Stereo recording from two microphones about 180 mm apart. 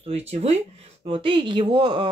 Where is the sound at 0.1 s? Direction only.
35° right (ahead or behind).